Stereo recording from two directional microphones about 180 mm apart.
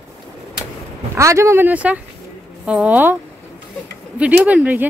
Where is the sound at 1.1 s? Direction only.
15° right (ahead or behind).